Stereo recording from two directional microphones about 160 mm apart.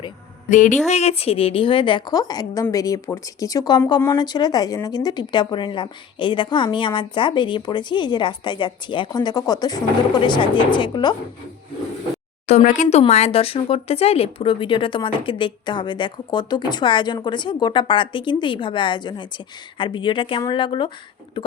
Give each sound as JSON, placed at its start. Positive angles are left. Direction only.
{"t": 0.5, "sound": "speech", "side_deg": 50}
{"t": 0.9, "sound": "speech", "side_deg": 40}
{"t": 12.5, "sound": "speech", "side_deg": 50}